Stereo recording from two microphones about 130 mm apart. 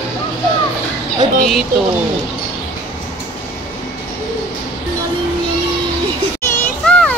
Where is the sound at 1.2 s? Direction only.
70° right (ahead or behind).